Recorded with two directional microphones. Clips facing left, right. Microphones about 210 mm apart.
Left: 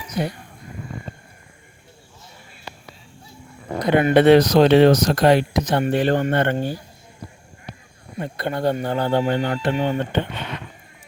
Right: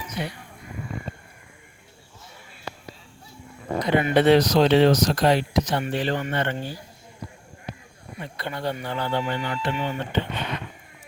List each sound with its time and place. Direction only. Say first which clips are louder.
0.1 s speech: left 7 dB; 40° left (ahead or behind)
3.8 s speech: left 5 dB; 55° left (ahead or behind)
8.2 s speech: left 7 dB; 50° left (ahead or behind)